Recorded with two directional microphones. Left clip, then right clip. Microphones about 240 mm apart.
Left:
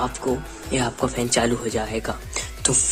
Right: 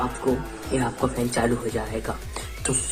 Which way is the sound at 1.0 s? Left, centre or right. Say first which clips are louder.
Left 4 dB; left.